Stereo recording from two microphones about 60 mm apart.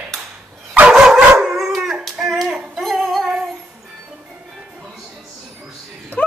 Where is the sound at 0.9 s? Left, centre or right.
Centre.